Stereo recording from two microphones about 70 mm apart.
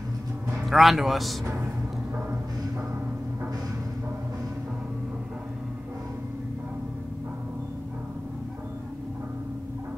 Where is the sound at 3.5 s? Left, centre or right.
Right.